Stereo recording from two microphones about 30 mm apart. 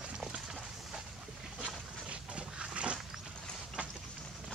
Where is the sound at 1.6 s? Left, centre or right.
Right.